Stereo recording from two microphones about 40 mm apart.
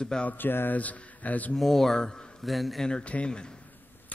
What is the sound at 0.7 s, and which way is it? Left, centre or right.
Speech, left.